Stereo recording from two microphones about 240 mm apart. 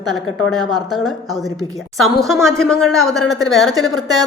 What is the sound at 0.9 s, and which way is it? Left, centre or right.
Speech, centre.